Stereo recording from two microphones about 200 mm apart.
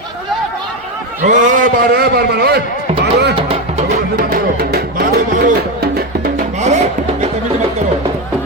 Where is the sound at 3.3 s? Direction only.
30° right (ahead or behind).